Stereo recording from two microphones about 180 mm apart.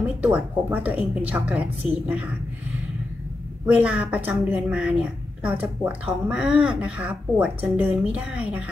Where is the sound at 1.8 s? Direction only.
30° left (ahead or behind).